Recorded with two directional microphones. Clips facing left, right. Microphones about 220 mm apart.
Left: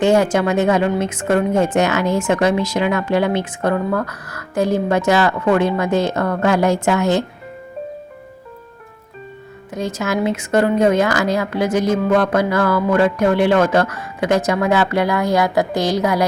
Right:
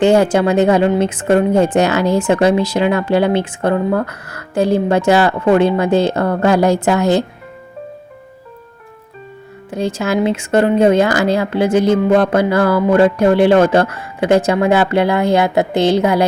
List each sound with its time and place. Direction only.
0.0 s a woman's voice: 30° right (ahead or behind)
9.6 s speech: 30° right (ahead or behind)